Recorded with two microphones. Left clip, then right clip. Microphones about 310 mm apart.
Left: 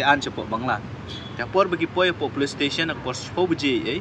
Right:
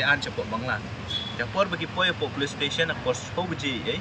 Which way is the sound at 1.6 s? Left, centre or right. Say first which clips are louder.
Left 4 dB; centre.